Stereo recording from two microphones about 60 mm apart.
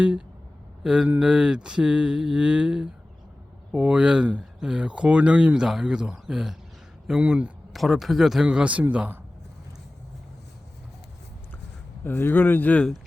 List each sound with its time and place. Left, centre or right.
0.0 s a man's voice: centre
0.8 s a sound: centre
7.2 s a man's voice: right
7.7 s a man's voice: centre
8.4 s a man's voice: centre
12.0 s speech: left